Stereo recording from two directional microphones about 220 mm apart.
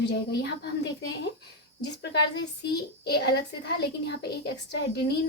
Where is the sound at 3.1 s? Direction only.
50° left (ahead or behind).